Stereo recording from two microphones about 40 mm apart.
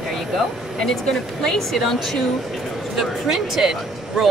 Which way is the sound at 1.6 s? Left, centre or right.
Centre.